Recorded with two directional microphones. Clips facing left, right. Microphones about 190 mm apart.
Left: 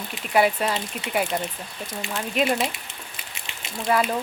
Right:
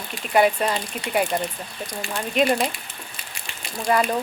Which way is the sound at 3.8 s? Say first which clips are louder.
Right 1 dB; 5° left (ahead or behind).